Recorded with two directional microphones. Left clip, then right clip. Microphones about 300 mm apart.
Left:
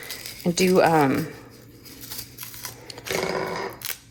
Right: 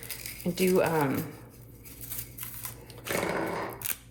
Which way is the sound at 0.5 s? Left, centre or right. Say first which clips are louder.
Left 7 dB; centre.